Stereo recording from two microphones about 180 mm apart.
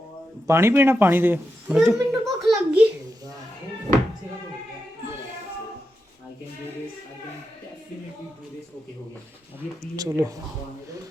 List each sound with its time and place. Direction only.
0.4 s speech: 15° right (ahead or behind)
9.9 s speech: 20° right (ahead or behind)